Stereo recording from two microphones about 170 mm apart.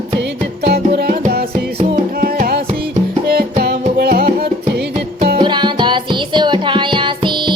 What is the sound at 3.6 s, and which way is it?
Music, 70° right (ahead or behind).